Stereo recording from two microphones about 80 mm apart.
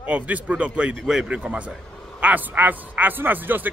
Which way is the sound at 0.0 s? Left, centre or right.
Centre.